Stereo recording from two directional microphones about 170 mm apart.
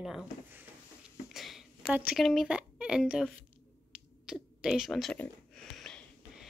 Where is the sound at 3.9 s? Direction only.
5° right (ahead or behind).